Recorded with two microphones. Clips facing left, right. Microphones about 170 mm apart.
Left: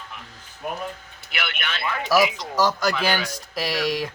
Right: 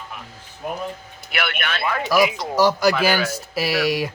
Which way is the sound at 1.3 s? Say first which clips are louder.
Right 5 dB; 55° right (ahead or behind).